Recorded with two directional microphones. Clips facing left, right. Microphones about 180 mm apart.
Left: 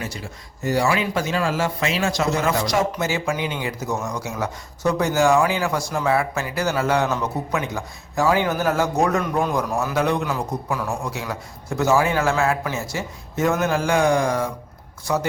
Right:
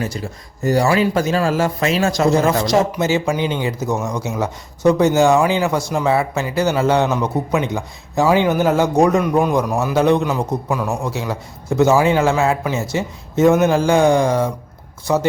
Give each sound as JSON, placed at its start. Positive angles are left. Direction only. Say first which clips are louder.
{"t": 0.0, "sound": "speech", "louder": "right 7 dB", "side_deg": -40}